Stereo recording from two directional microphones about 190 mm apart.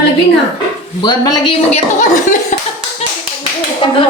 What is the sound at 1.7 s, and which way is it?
Speech, 40° left (ahead or behind).